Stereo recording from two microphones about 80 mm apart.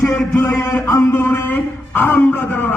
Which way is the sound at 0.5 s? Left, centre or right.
Left.